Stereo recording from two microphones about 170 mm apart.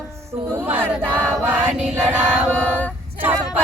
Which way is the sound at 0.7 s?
10° right (ahead or behind).